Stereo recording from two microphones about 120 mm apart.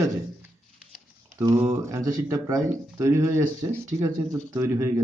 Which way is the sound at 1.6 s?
20° right (ahead or behind).